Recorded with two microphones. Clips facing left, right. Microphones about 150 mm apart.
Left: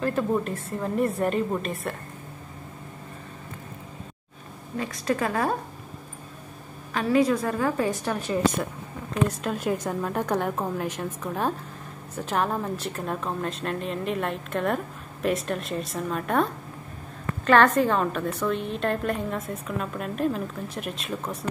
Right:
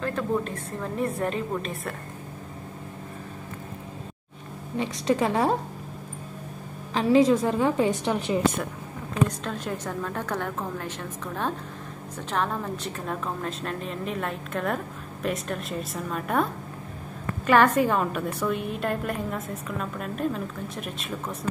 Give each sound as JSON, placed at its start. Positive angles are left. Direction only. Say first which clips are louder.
{"t": 0.0, "sound": "a woman's voice", "louder": "left 2 dB", "side_deg": 5}
{"t": 4.7, "sound": "a woman's voice", "louder": "right 2 dB", "side_deg": -20}
{"t": 6.9, "sound": "a woman's voice", "louder": "right 3 dB", "side_deg": -25}
{"t": 9.4, "sound": "a woman's voice", "louder": "left 4 dB", "side_deg": 10}
{"t": 17.5, "sound": "a woman's voice", "louder": "left 1 dB", "side_deg": -10}